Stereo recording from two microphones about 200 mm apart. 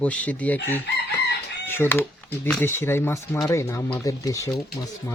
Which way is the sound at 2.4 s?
10° left (ahead or behind).